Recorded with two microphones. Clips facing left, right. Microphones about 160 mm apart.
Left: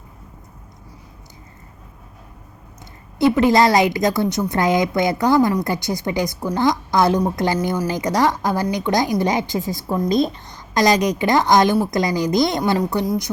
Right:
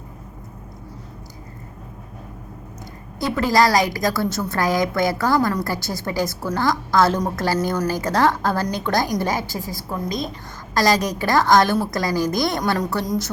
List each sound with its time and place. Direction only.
3.2 s a woman's voice: 20° left (ahead or behind)